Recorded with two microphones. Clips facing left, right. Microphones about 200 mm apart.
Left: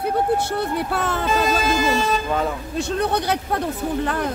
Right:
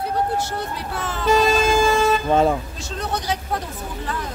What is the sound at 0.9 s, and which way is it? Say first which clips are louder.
Speech: left 5 dB; 60° left (ahead or behind).